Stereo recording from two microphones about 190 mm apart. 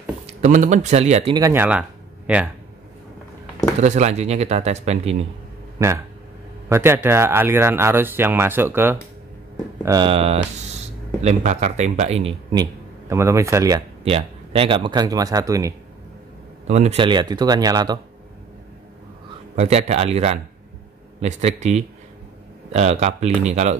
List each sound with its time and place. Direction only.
0.3 s speech: 40° right (ahead or behind)
1.3 s speech: 15° right (ahead or behind)
3.8 s speech: 35° right (ahead or behind)
5.8 s speech: 15° right (ahead or behind)
9.8 s speech: 25° right (ahead or behind)
13.1 s speech: 15° right (ahead or behind)
14.0 s speech: 30° right (ahead or behind)
16.6 s speech: 35° right (ahead or behind)
19.5 s speech: 35° right (ahead or behind)